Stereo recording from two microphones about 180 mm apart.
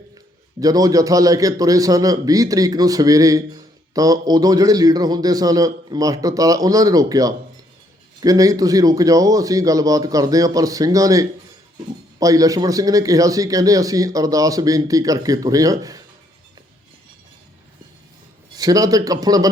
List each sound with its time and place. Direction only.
0.6 s a man's voice: 20° right (ahead or behind)
18.5 s a man's voice: 20° right (ahead or behind)